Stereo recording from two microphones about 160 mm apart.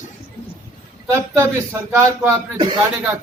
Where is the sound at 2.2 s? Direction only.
25° right (ahead or behind).